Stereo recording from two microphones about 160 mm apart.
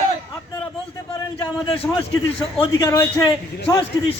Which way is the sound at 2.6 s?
25° left (ahead or behind).